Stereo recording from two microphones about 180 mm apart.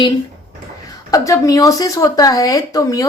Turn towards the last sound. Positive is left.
turn(degrees=20)  # may be behind; listen again after turning